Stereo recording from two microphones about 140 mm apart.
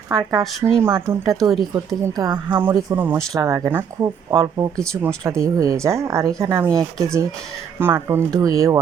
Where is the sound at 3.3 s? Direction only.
25° right (ahead or behind).